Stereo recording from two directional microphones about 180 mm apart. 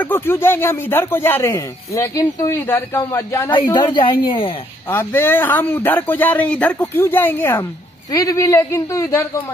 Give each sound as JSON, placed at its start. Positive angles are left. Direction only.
{"t": 0.0, "sound": "speech", "side_deg": 10}
{"t": 3.7, "sound": "speech", "side_deg": 25}
{"t": 4.9, "sound": "speech", "side_deg": 10}